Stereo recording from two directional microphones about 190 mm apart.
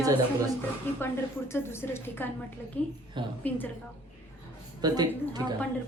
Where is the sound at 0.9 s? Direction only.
10° left (ahead or behind).